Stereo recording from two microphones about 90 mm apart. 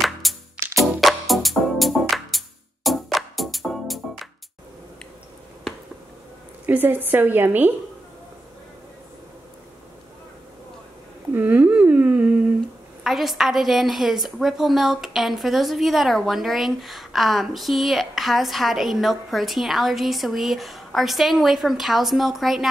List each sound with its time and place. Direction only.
0.0 s music: centre (ahead or behind)
6.6 s speech: 20° right (ahead or behind)
11.3 s humming: 20° right (ahead or behind)
13.0 s a woman's voice: centre (ahead or behind)